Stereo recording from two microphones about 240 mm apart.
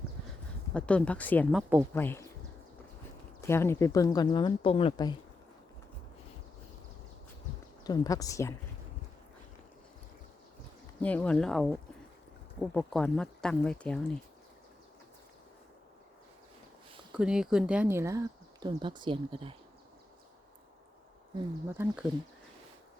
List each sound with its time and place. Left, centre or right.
0.7 s a woman's voice: centre
3.4 s a woman's voice: centre
7.9 s a woman's voice: centre
11.0 s speech: centre
17.2 s speech: centre; by 19.5 s right
21.7 s speech: centre